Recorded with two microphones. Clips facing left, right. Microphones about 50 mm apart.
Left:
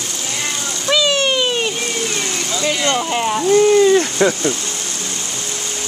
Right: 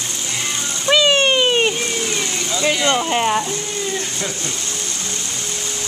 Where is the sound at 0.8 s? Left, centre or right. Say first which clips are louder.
Right 2 dB; right.